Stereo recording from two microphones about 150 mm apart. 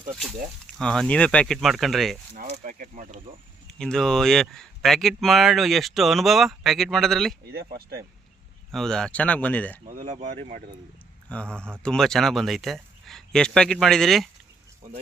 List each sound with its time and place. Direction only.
0.8 s speech: 5° left (ahead or behind)
2.3 s speech: 60° right (ahead or behind)
3.7 s speech: 5° left (ahead or behind)
7.4 s speech: 90° right
8.7 s speech: 5° left (ahead or behind)
9.8 s speech: 60° right (ahead or behind)
10.2 s speech: 50° right (ahead or behind)
11.3 s speech: 5° left (ahead or behind)